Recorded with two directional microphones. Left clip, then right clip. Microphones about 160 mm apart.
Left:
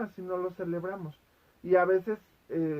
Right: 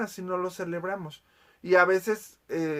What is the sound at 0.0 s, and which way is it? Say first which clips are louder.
Speech: right 3 dB; 35° right (ahead or behind).